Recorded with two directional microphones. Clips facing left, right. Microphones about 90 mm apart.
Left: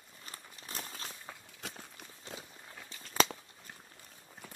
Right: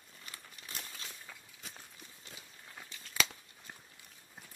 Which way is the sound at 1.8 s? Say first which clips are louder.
Left 4 dB; 65° left (ahead or behind).